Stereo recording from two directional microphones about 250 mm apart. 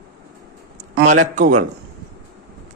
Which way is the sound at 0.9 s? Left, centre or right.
Right.